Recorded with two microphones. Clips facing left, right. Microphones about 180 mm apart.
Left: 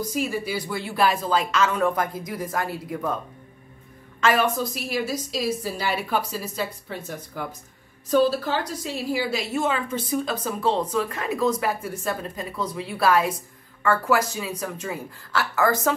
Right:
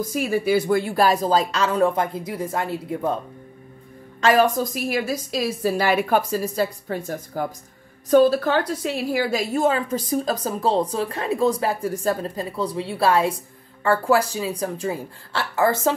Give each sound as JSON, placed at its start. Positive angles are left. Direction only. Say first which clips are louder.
{"t": 0.0, "sound": "speech", "louder": "right 4 dB", "side_deg": -50}
{"t": 4.2, "sound": "a woman's voice", "louder": "right 4 dB", "side_deg": -35}
{"t": 9.3, "sound": "a woman's voice", "louder": "right 4 dB", "side_deg": -40}